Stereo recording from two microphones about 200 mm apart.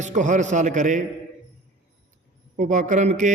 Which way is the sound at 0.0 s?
35° right (ahead or behind).